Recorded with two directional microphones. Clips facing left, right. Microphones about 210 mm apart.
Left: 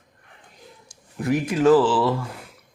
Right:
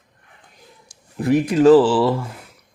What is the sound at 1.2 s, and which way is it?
Speech, 35° right (ahead or behind).